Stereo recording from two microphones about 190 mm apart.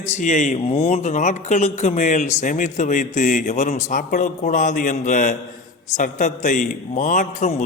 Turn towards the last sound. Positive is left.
turn(degrees=40)  # may be behind; listen again after turning